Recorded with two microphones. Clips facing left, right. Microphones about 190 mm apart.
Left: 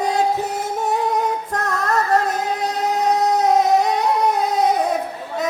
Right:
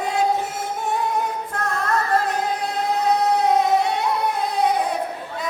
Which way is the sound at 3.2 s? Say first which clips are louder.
Left 4 dB; 40° left (ahead or behind).